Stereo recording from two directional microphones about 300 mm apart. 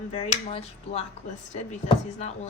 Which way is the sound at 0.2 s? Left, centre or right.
Left.